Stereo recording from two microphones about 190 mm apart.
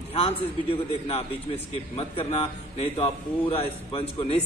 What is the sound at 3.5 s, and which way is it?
Speech, 30° left (ahead or behind).